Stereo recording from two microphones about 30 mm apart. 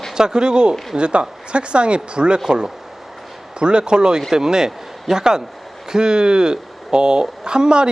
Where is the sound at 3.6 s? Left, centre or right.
Right.